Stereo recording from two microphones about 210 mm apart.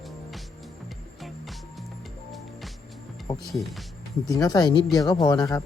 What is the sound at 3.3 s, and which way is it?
Speech, centre (ahead or behind).